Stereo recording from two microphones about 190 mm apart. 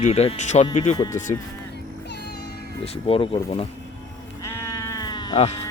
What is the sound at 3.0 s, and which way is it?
Speech, 30° left (ahead or behind).